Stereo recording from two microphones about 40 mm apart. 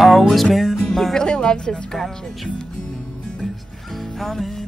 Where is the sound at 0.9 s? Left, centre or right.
Centre.